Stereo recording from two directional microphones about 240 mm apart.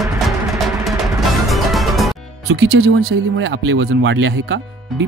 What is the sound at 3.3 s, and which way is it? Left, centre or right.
Speech, right.